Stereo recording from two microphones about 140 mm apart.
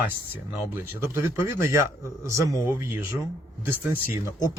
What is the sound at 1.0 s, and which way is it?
A man's voice, 20° right (ahead or behind).